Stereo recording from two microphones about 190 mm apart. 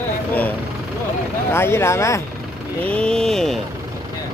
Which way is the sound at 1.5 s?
15° left (ahead or behind).